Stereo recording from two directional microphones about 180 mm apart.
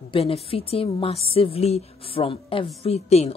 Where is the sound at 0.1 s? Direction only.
35° left (ahead or behind).